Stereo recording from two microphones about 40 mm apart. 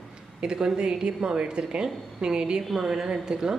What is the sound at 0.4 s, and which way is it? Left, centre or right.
Speech, right.